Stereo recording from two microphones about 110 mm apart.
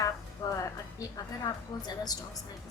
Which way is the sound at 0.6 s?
35° left (ahead or behind).